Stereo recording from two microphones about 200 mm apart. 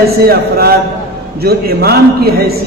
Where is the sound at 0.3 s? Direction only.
50° right (ahead or behind).